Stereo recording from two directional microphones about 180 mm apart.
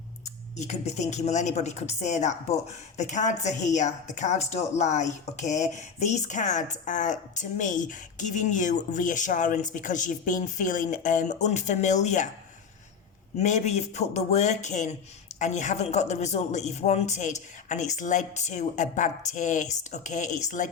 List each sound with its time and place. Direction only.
0.5 s speech: 40° left (ahead or behind)
13.4 s speech: 40° left (ahead or behind)